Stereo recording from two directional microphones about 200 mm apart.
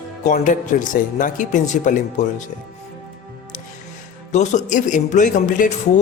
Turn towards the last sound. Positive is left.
turn(degrees=40)  # may be behind; listen again after turning